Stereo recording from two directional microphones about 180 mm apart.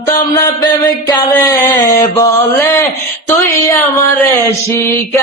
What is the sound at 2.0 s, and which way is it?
Mantra, 15° left (ahead or behind).